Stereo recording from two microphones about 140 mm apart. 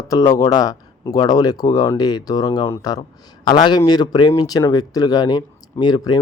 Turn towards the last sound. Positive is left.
turn(degrees=30)  # may be behind; listen again after turning